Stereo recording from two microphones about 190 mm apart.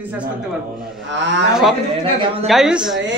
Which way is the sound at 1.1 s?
70° right (ahead or behind).